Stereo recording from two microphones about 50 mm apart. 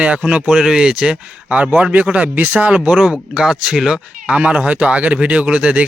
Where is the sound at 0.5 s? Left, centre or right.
Centre.